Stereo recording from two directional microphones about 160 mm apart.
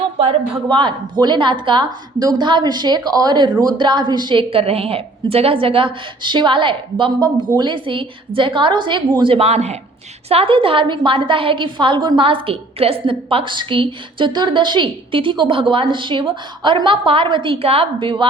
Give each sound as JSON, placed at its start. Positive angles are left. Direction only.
{"t": 0.2, "sound": "a woman's voice", "side_deg": -35}